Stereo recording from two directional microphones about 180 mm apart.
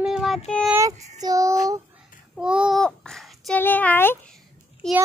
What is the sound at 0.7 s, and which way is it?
Speech, 15° right (ahead or behind).